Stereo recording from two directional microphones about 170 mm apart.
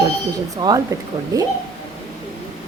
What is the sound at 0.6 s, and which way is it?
Speech, 20° right (ahead or behind).